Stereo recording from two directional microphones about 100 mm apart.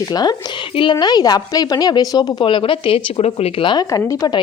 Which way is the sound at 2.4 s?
60° left (ahead or behind).